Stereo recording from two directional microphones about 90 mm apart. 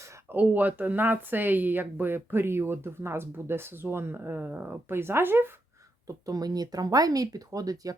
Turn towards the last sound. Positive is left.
turn(degrees=-40)  # may be behind; listen again after turning